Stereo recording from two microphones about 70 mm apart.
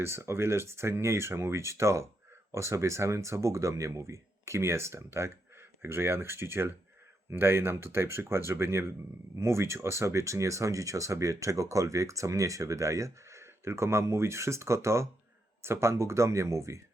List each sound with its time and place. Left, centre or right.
0.0 s speech: right